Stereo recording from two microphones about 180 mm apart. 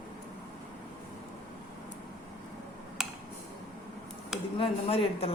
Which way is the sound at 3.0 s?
Centre (ahead or behind).